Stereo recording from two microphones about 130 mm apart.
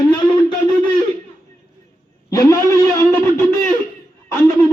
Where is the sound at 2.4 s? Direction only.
25° left (ahead or behind).